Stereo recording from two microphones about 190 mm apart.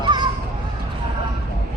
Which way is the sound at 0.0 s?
25° right (ahead or behind).